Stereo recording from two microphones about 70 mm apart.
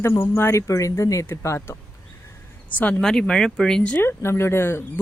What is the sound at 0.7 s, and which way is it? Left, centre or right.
Speech, left.